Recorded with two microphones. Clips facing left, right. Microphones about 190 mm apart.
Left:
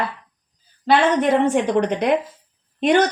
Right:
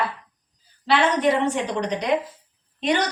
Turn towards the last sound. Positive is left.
turn(degrees=50)  # may be behind; listen again after turning